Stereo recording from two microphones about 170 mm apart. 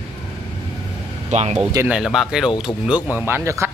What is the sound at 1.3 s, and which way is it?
Speech, 40° right (ahead or behind).